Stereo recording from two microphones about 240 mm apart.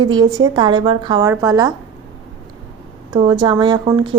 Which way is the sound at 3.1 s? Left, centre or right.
Centre.